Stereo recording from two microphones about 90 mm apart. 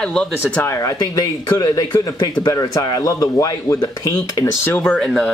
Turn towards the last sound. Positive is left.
turn(degrees=15)  # may be behind; listen again after turning